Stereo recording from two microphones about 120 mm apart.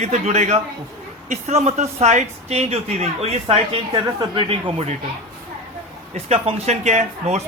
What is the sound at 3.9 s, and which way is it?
Speech, 35° right (ahead or behind).